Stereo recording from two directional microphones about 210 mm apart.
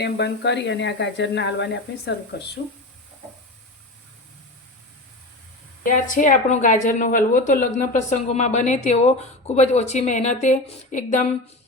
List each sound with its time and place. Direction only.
0.0 s speech: 55° left (ahead or behind)
5.8 s a woman's voice: 40° left (ahead or behind)